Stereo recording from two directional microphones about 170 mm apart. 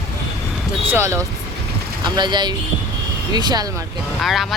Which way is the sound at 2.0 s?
25° right (ahead or behind).